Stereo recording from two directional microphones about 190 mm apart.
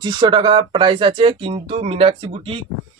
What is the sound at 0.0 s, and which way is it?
A man's voice, 25° right (ahead or behind).